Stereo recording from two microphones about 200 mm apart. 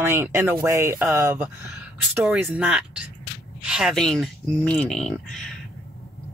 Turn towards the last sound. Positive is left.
turn(degrees=5)  # may be behind; listen again after turning